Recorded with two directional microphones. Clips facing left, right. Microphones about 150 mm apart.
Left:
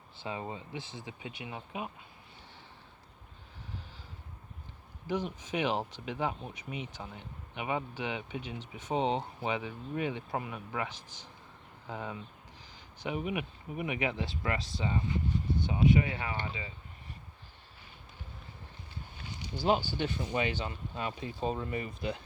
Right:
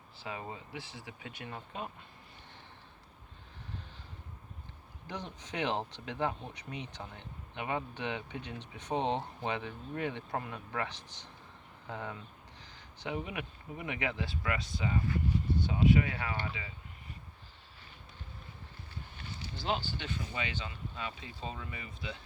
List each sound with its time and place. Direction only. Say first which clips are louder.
0.2 s speech: left 3 dB; 25° left (ahead or behind)
5.0 s speech: left 8 dB; 10° left (ahead or behind)
19.3 s a sound: left 4 dB; 15° left (ahead or behind)
20.0 s speech: left 7 dB; 45° left (ahead or behind)